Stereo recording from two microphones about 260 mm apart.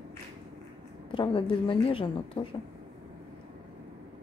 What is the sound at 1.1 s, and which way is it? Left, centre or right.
A woman's voice, centre.